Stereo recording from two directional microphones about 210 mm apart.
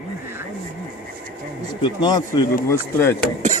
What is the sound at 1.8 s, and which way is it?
Speech, 20° left (ahead or behind).